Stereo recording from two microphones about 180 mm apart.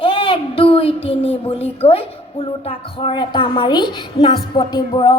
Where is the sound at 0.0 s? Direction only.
30° left (ahead or behind).